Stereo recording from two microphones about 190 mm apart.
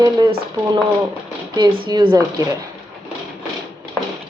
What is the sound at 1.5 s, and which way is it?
Speech, 20° right (ahead or behind).